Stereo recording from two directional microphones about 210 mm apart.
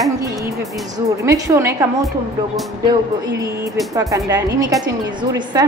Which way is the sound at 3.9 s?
15° right (ahead or behind).